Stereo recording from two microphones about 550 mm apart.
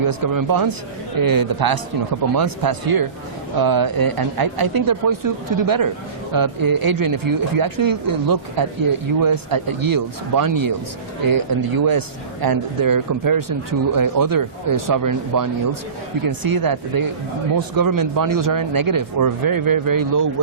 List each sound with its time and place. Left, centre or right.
0.0 s a man's voice: right